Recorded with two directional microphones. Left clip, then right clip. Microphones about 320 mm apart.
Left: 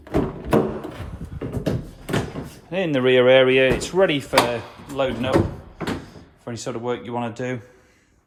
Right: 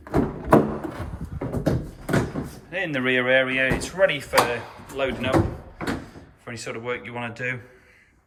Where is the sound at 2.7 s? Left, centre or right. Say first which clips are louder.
Left 4 dB; left.